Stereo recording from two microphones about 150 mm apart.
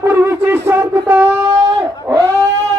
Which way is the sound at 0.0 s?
15° right (ahead or behind).